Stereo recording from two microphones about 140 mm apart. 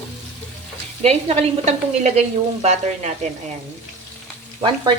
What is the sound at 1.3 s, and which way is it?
Speech, 50° right (ahead or behind).